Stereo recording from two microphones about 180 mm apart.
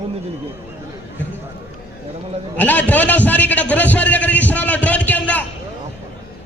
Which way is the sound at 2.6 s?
10° left (ahead or behind).